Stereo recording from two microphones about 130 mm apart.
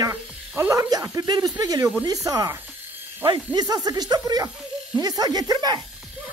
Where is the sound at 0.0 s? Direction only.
25° right (ahead or behind).